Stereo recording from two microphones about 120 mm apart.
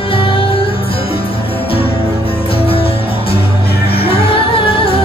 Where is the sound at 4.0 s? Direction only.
50° left (ahead or behind).